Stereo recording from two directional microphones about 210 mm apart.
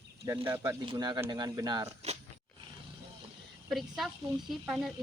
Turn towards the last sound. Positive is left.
turn(degrees=0)  # may be behind; listen again after turning